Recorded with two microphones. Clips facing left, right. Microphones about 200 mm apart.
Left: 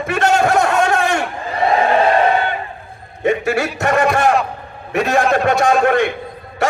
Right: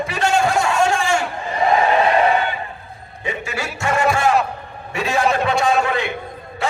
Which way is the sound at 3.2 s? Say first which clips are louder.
Left 10 dB; 55° left (ahead or behind).